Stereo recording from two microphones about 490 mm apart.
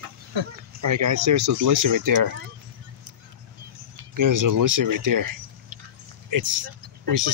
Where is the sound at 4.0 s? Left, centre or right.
Right.